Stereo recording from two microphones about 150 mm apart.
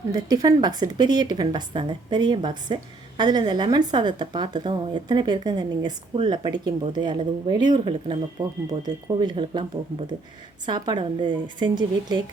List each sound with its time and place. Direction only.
0.1 s a woman's voice: 25° right (ahead or behind)
10.7 s a woman's voice: 30° right (ahead or behind)